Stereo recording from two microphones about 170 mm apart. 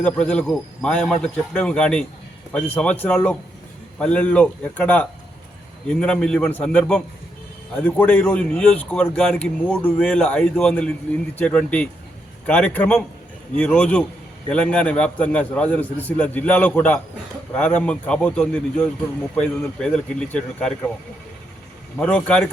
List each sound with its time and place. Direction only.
0.0 s speech: 5° left (ahead or behind)
21.9 s speech: 10° left (ahead or behind)